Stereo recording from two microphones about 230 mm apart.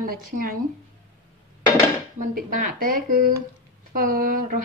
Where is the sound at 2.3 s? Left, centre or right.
Right.